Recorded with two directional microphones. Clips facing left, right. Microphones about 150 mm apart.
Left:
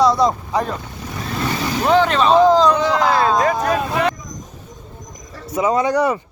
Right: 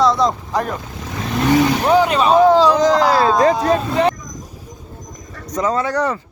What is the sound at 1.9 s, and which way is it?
Speech, 10° right (ahead or behind).